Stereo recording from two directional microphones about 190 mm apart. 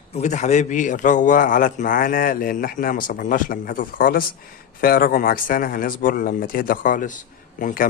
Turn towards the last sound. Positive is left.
turn(degrees=45)  # may be behind; listen again after turning